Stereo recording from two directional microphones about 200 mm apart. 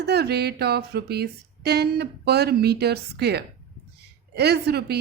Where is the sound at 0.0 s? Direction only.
55° right (ahead or behind).